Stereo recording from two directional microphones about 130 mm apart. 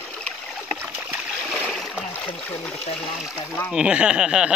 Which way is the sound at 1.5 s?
Centre (ahead or behind).